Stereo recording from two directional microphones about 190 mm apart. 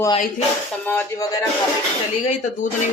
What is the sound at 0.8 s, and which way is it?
Speech, 10° left (ahead or behind).